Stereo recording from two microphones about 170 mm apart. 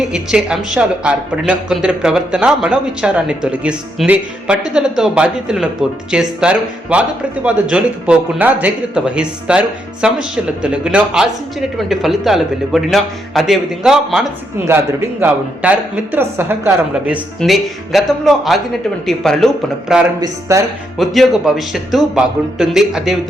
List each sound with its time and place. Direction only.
0.0 s speech: 5° right (ahead or behind)
20.2 s speech: 20° right (ahead or behind)
21.0 s speech: centre (ahead or behind)